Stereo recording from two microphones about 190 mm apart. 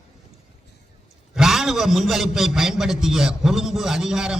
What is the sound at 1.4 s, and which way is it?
A man's voice, centre (ahead or behind).